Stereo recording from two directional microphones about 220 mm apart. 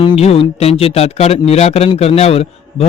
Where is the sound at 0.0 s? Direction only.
25° left (ahead or behind).